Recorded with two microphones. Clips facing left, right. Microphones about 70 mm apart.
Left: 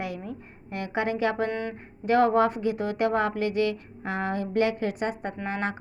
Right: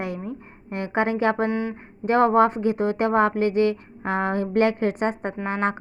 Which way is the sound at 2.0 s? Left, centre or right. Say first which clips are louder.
Right 3 dB; right.